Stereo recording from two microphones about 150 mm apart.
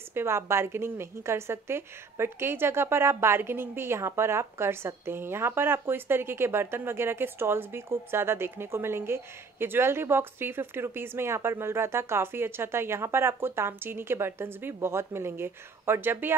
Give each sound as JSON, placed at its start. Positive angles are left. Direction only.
{"t": 0.1, "sound": "a woman's voice", "side_deg": -15}